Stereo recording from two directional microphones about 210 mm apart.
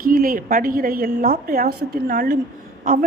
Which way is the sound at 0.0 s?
40° right (ahead or behind).